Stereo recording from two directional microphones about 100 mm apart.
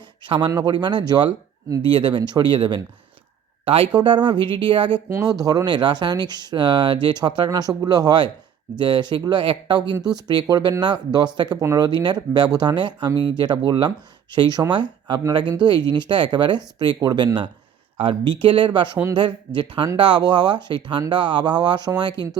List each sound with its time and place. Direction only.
0.3 s speech: 50° right (ahead or behind)
3.9 s speech: 50° right (ahead or behind)
5.0 s speech: 30° right (ahead or behind)
5.4 s speech: 40° right (ahead or behind)
17.9 s speech: 60° right (ahead or behind); by 22.1 s 45° right (ahead or behind)